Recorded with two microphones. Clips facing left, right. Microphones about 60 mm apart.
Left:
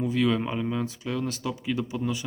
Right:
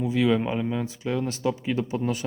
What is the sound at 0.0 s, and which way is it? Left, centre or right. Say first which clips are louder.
Speech: right 2 dB; centre.